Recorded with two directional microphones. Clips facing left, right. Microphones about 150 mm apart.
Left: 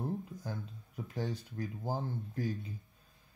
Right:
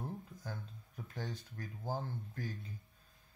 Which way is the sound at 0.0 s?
10° left (ahead or behind).